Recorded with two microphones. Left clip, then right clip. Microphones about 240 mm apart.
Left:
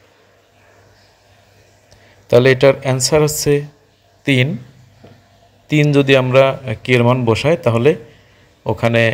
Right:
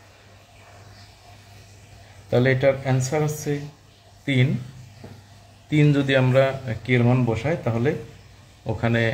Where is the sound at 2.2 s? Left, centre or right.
Left.